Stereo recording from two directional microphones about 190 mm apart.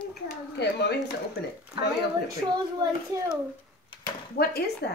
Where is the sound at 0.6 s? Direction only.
60° left (ahead or behind).